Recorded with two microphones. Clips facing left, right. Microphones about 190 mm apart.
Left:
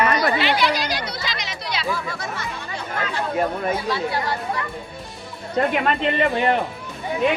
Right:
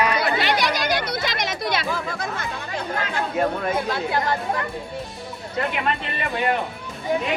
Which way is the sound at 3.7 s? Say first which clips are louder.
Right 1 dB; 50° right (ahead or behind).